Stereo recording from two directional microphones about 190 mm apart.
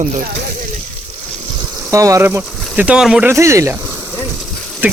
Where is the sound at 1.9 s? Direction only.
15° right (ahead or behind).